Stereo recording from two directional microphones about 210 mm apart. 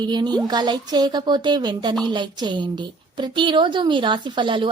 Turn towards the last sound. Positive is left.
turn(degrees=-25)  # may be behind; listen again after turning